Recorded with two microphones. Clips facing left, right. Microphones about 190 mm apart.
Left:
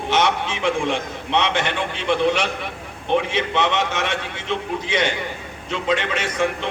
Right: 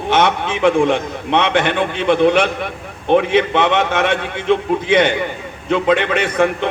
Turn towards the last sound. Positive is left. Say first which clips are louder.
# right 6 dB
turn(degrees=-60)  # may be behind; listen again after turning